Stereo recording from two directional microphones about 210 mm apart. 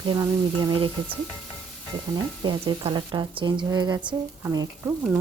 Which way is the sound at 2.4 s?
20° right (ahead or behind).